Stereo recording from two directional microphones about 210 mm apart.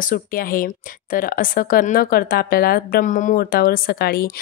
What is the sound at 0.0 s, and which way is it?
A woman's voice, 40° left (ahead or behind).